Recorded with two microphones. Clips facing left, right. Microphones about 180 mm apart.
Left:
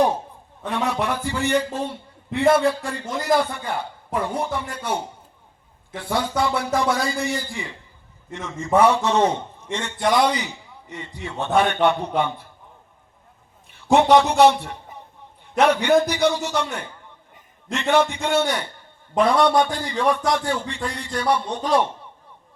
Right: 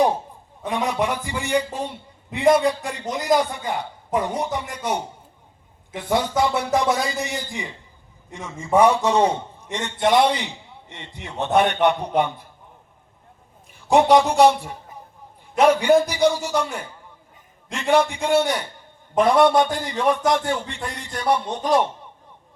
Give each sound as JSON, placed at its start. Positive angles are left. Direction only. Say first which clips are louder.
{"t": 0.6, "sound": "a man's voice", "louder": "right 1 dB", "side_deg": -15}
{"t": 13.9, "sound": "a man's voice", "louder": "even", "side_deg": -10}